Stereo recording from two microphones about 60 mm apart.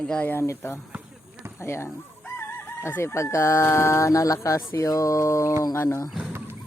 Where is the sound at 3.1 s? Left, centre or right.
Left.